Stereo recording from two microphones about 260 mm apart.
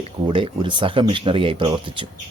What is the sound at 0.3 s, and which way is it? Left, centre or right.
Speech, centre.